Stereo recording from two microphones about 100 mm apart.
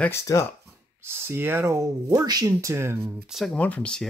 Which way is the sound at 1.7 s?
35° right (ahead or behind).